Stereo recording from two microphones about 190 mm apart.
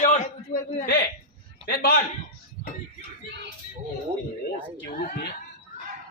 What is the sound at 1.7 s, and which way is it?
Speech, 60° left (ahead or behind).